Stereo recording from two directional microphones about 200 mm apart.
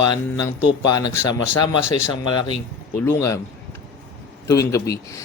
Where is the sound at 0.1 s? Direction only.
20° left (ahead or behind).